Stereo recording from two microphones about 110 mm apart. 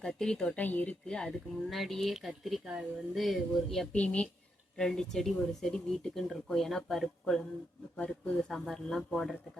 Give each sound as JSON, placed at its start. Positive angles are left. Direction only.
{"t": 0.0, "sound": "speech", "side_deg": 5}
{"t": 3.9, "sound": "speech", "side_deg": 10}